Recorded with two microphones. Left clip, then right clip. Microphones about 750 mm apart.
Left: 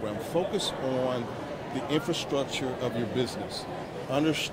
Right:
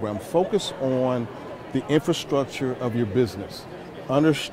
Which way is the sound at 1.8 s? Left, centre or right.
Right.